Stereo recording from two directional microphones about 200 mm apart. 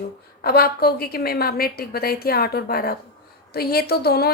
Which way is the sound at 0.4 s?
50° left (ahead or behind).